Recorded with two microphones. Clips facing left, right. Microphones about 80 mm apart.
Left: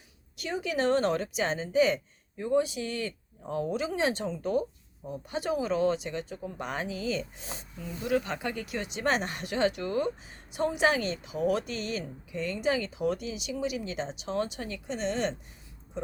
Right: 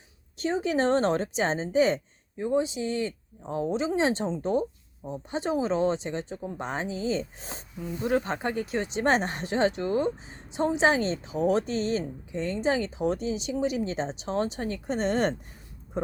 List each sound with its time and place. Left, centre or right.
0.3 s speech: right
7.8 s speech: centre
8.0 s speech: right